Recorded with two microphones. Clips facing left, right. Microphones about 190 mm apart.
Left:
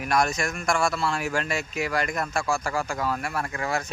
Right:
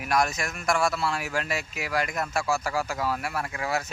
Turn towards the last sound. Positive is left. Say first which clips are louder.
# left 1 dB
turn(degrees=-5)  # may be behind; listen again after turning